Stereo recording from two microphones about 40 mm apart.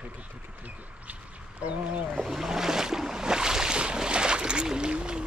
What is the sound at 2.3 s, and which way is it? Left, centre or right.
Boat, centre.